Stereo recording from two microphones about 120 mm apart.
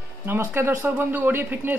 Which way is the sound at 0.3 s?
20° right (ahead or behind).